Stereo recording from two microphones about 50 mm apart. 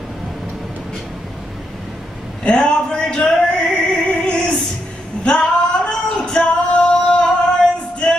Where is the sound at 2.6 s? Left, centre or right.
Centre.